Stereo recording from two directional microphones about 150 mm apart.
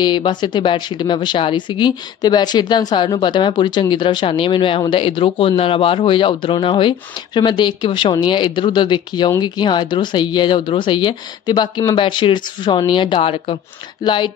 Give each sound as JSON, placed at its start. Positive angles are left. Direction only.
{"t": 0.0, "sound": "speech", "side_deg": 30}